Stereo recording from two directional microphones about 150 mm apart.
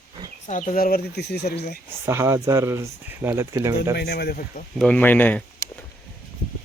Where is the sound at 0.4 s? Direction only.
55° left (ahead or behind); by 1.8 s 90° left.